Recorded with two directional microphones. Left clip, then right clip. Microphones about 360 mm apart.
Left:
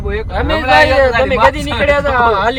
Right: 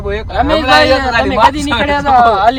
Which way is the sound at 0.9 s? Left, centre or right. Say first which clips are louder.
Left 2 dB; centre.